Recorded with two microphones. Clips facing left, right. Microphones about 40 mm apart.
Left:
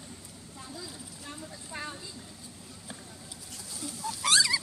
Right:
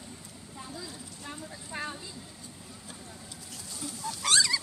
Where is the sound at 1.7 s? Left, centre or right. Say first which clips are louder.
Right 3 dB; right.